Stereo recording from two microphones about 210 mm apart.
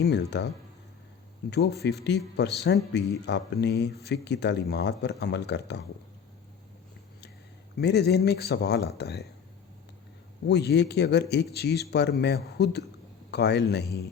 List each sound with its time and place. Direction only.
0.0 s speech: 55° left (ahead or behind)
1.5 s speech: 50° left (ahead or behind)
7.8 s speech: 50° left (ahead or behind)
10.4 s speech: 50° left (ahead or behind)